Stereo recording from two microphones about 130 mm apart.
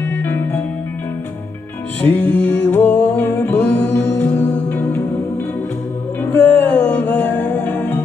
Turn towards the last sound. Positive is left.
turn(degrees=15)  # may be behind; listen again after turning